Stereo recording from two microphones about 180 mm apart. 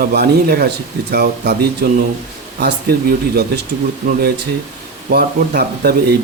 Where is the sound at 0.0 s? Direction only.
60° right (ahead or behind).